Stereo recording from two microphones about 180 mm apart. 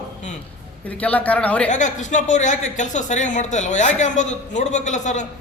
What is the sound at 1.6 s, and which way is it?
A man's voice, 45° left (ahead or behind).